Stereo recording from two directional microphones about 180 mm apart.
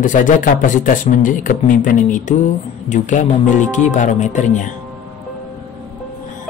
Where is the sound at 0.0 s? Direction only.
45° left (ahead or behind).